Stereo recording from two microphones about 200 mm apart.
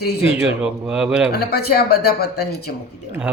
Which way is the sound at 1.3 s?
50° left (ahead or behind).